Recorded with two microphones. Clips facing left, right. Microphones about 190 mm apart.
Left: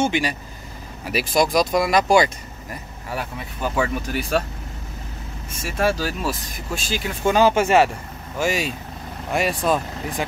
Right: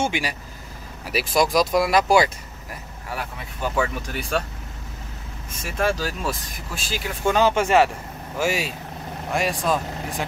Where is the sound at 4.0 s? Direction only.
5° left (ahead or behind).